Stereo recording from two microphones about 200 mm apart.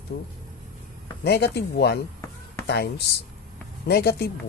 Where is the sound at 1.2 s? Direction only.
55° left (ahead or behind).